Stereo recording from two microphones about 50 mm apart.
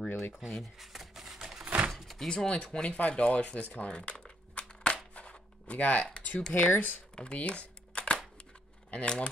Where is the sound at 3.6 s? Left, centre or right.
Left.